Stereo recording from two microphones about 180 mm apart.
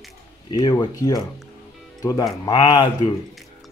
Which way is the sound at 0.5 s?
25° left (ahead or behind).